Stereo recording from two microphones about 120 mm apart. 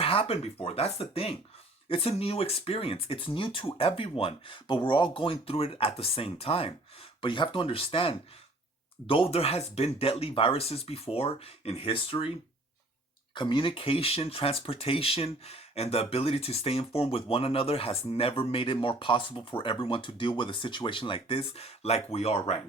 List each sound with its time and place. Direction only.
0.0 s speech: 50° left (ahead or behind)
13.3 s speech: 40° left (ahead or behind); by 22.6 s 55° left (ahead or behind)